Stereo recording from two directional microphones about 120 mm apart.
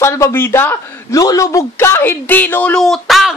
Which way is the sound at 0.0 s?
25° left (ahead or behind).